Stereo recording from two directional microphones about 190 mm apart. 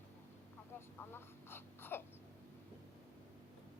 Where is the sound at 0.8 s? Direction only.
10° left (ahead or behind).